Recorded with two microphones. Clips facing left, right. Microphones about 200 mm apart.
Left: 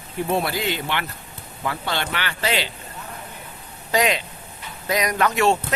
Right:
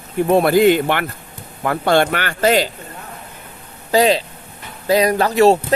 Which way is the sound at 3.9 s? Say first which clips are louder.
Right 7 dB; 35° right (ahead or behind).